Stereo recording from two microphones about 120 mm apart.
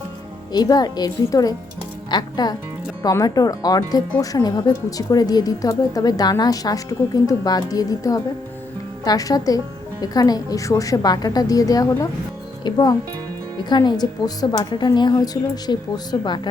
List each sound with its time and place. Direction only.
0.5 s speech: 35° left (ahead or behind)